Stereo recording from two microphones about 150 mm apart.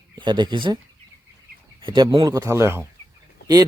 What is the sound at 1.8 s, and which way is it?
Speech, 30° right (ahead or behind).